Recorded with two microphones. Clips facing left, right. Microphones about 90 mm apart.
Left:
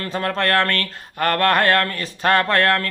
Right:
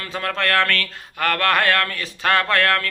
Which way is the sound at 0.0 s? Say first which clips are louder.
Left 2 dB; 35° left (ahead or behind).